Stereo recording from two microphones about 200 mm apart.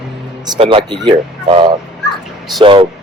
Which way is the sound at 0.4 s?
25° right (ahead or behind).